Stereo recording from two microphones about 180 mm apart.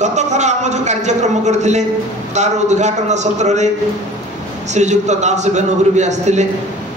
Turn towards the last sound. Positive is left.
turn(degrees=-40)  # may be behind; listen again after turning